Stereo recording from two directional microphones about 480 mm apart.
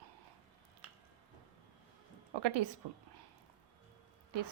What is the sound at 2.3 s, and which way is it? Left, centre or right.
Speech, right.